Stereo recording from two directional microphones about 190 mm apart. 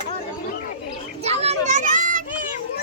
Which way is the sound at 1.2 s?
35° right (ahead or behind).